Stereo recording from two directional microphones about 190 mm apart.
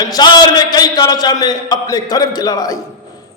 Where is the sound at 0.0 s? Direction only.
20° left (ahead or behind).